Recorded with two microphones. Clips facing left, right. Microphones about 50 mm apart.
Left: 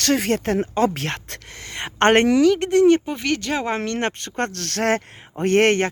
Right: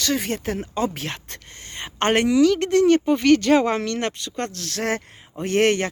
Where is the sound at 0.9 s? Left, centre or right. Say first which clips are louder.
Left 4 dB; left.